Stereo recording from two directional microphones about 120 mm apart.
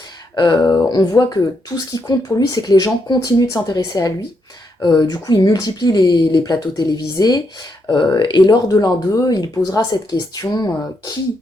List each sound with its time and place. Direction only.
0.3 s speech: 40° left (ahead or behind)